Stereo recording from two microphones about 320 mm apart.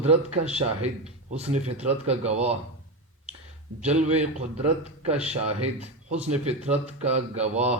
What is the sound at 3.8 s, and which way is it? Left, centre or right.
Speech, right.